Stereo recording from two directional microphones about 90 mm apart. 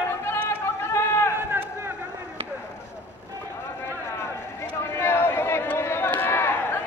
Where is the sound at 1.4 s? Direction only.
25° right (ahead or behind).